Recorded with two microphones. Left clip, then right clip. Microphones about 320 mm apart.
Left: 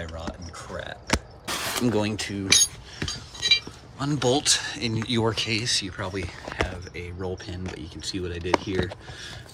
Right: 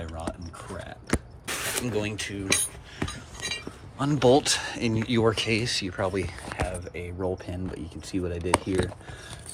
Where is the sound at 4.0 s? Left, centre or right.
Centre.